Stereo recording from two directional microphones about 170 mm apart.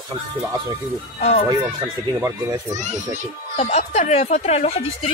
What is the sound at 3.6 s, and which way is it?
Speech, 40° left (ahead or behind).